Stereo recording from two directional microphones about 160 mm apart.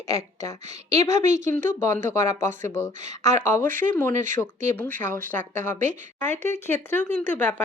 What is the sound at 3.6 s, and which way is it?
Speech, 60° right (ahead or behind).